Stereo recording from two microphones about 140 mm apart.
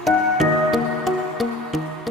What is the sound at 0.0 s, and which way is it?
Music, centre (ahead or behind).